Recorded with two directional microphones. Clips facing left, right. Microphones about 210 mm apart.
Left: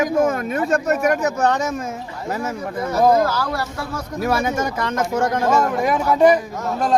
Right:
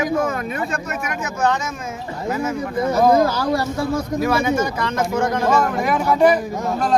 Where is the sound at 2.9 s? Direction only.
15° right (ahead or behind).